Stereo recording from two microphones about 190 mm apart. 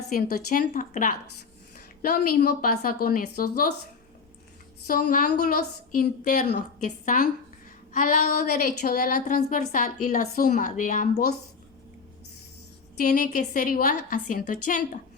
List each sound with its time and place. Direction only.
0.2 s speech: 55° left (ahead or behind)
4.9 s speech: 50° left (ahead or behind)
13.1 s speech: 50° left (ahead or behind)